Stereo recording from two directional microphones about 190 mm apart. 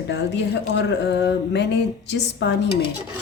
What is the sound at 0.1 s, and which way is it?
Speech, 65° left (ahead or behind).